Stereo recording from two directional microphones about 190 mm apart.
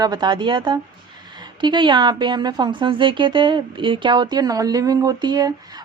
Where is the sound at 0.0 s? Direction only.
20° right (ahead or behind).